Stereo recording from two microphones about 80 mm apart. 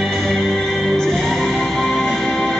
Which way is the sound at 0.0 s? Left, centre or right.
Centre.